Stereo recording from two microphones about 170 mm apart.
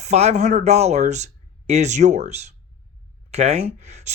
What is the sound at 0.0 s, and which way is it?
Speech, 40° right (ahead or behind).